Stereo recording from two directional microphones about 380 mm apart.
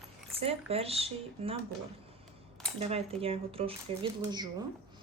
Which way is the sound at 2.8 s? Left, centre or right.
Centre.